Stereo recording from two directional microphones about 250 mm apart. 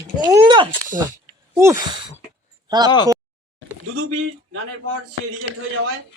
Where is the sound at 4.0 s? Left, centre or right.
Right.